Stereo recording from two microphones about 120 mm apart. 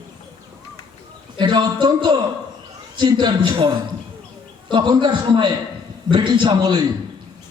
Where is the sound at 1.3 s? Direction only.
40° right (ahead or behind).